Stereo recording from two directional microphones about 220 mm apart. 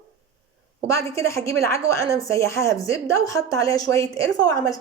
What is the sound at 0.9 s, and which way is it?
A woman's voice, 15° left (ahead or behind).